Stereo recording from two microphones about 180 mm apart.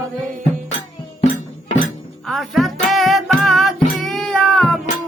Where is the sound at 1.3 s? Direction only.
45° left (ahead or behind).